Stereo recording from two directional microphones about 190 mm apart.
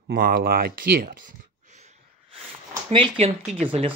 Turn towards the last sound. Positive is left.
turn(degrees=-30)  # may be behind; listen again after turning